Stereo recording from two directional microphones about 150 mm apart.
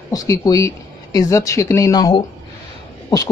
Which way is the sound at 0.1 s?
25° left (ahead or behind).